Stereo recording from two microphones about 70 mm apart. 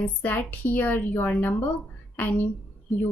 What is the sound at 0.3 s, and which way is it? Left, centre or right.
A woman's voice, left.